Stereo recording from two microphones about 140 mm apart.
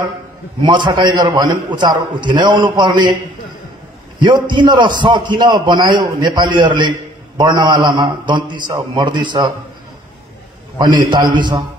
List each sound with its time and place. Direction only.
0.6 s a man's voice: 35° right (ahead or behind)
4.2 s a man's voice: 35° right (ahead or behind)
11.1 s a man's voice: 30° right (ahead or behind)